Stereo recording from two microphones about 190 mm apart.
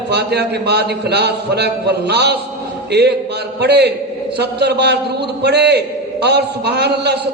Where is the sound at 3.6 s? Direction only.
60° right (ahead or behind).